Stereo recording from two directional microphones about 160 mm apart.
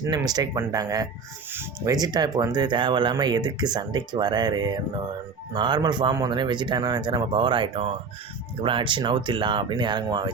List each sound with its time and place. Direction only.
0.0 s speech: 25° right (ahead or behind)